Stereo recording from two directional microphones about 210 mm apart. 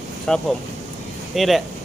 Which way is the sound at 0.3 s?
Centre (ahead or behind).